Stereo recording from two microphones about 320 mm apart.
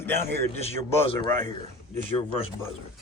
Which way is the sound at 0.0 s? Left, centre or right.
Centre.